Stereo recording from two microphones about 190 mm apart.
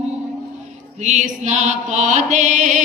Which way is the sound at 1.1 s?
40° right (ahead or behind).